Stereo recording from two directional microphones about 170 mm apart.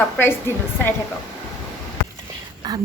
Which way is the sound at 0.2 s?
15° left (ahead or behind).